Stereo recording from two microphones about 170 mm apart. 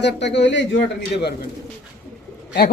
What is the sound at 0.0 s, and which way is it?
A man's voice, 90° left.